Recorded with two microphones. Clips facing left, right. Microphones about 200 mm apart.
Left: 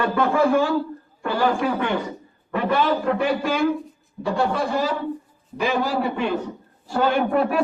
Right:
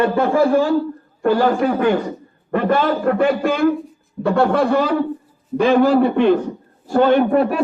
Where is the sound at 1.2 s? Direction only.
45° right (ahead or behind).